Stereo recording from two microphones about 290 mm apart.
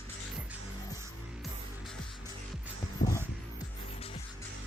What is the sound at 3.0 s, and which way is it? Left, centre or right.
Music, left.